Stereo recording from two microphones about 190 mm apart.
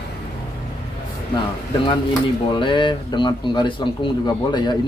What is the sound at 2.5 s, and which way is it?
Speech, 25° left (ahead or behind).